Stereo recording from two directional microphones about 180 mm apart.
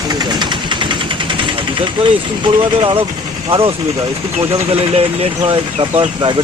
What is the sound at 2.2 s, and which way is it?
Speech, 25° right (ahead or behind).